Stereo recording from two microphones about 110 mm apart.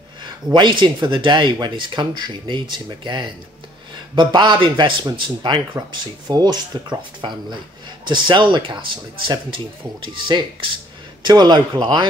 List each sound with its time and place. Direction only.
0.2 s speech: 45° right (ahead or behind)